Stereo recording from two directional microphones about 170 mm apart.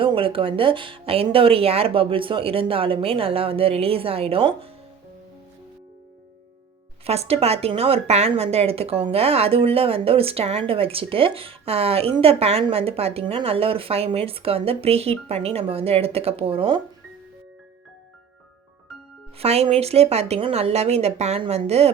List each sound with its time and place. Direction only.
0.0 s a woman's voice: 30° right (ahead or behind)
7.0 s a woman's voice: 35° right (ahead or behind)
19.4 s a woman's voice: 35° right (ahead or behind)